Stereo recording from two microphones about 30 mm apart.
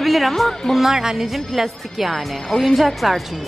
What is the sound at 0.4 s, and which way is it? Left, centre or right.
Speech, centre.